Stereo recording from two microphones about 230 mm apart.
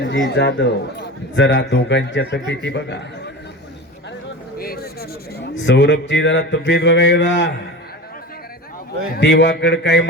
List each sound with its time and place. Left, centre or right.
0.0 s a man's voice: left
4.5 s a sound: left
5.6 s a man's voice: left
9.1 s a man's voice: left